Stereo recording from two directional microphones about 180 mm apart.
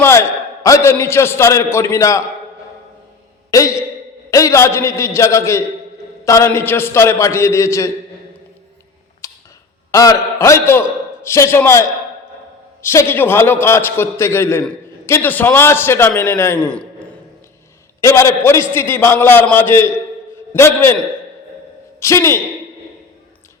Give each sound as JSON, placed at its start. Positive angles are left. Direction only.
{"t": 0.0, "sound": "a man's voice", "side_deg": 15}
{"t": 3.5, "sound": "a man's voice", "side_deg": 15}
{"t": 9.2, "sound": "tick", "side_deg": 20}
{"t": 9.9, "sound": "a man's voice", "side_deg": 20}
{"t": 18.0, "sound": "a man's voice", "side_deg": 15}
{"t": 22.0, "sound": "a man's voice", "side_deg": 15}